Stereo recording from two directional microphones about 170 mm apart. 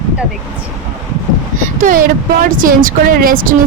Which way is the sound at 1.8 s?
55° right (ahead or behind).